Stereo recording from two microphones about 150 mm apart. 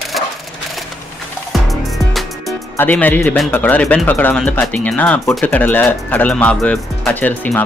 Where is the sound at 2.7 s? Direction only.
10° left (ahead or behind).